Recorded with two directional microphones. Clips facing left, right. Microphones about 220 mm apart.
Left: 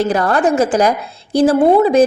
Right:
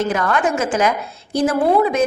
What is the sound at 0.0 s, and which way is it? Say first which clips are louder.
A woman's voice: left 4 dB; 35° left (ahead or behind).